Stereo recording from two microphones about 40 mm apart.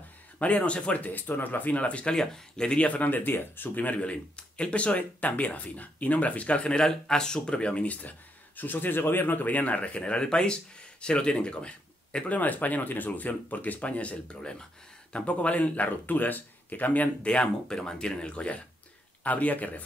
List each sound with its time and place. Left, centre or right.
0.4 s speech: left
1.0 s speech: left
1.8 s speech: left
2.1 s speech: centre
2.8 s speech: left
3.3 s speech: left
4.0 s speech: left
6.8 s speech: centre
12.3 s speech: left
15.1 s speech: left
17.3 s speech: left